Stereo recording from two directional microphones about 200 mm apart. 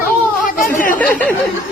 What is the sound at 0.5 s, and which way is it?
Speech, 40° left (ahead or behind).